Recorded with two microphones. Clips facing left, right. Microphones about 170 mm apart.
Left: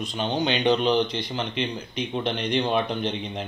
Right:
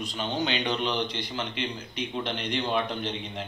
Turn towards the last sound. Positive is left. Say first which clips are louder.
# left 5 dB
turn(degrees=20)  # may be behind; listen again after turning